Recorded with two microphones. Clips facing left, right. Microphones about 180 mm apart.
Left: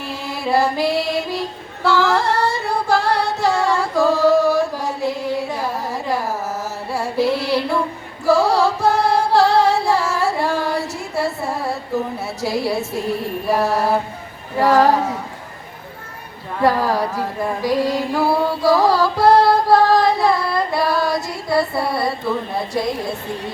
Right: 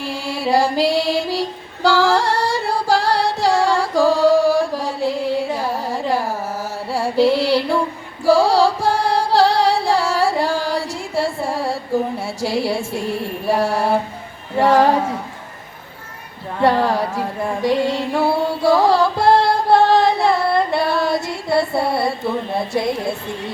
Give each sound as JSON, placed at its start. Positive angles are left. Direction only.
{"t": 0.5, "sound": "female singing", "side_deg": -30}
{"t": 1.8, "sound": "singing", "side_deg": -30}
{"t": 6.9, "sound": "music", "side_deg": -30}
{"t": 13.5, "sound": "a sound", "side_deg": -30}
{"t": 16.6, "sound": "a sound", "side_deg": -25}
{"t": 17.7, "sound": "female singing", "side_deg": -25}
{"t": 18.1, "sound": "music", "side_deg": -25}
{"t": 22.7, "sound": "female singing", "side_deg": -25}